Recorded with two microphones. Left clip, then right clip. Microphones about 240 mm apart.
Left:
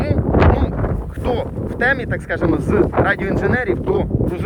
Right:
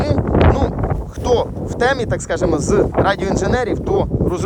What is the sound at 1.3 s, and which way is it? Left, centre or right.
Speech, right.